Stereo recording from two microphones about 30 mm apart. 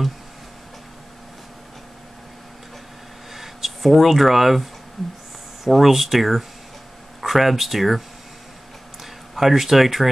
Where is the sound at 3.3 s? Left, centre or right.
Centre.